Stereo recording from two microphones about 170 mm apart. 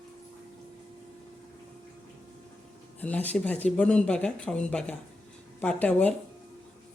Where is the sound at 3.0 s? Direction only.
10° left (ahead or behind).